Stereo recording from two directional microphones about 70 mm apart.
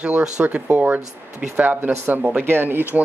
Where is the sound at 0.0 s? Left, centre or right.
Centre.